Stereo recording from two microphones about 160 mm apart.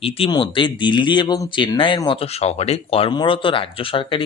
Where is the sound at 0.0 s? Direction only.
35° left (ahead or behind).